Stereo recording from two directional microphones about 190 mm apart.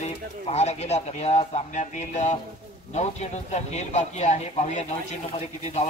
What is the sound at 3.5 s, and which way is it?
Speech, 35° left (ahead or behind).